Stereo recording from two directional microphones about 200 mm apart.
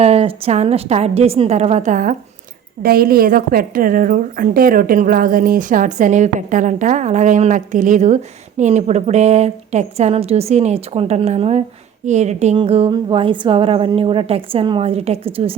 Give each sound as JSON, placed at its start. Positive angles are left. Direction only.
{"t": 0.0, "sound": "a woman's voice", "side_deg": -30}